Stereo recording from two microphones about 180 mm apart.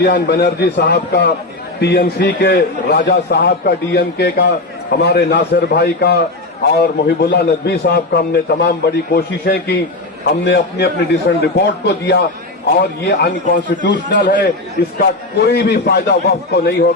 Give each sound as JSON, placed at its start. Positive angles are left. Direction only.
{"t": 0.0, "sound": "a man's voice", "side_deg": 65}
{"t": 13.1, "sound": "a man's voice", "side_deg": 60}
{"t": 13.7, "sound": "speech", "side_deg": 80}
{"t": 14.9, "sound": "a man's voice", "side_deg": 60}